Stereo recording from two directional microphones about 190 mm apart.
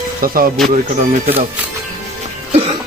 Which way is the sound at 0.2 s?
50° right (ahead or behind).